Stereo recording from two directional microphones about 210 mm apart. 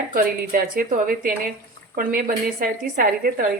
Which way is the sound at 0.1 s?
40° right (ahead or behind).